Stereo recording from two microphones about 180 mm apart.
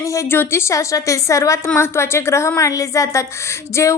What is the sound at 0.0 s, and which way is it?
A woman's voice, 15° left (ahead or behind).